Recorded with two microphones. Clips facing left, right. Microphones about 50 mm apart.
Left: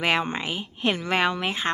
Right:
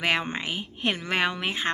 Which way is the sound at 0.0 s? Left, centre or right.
Centre.